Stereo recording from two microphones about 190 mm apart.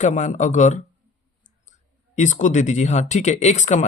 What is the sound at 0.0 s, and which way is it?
Speech, 40° left (ahead or behind).